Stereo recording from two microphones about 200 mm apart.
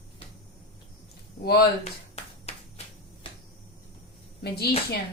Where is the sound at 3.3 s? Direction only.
25° left (ahead or behind).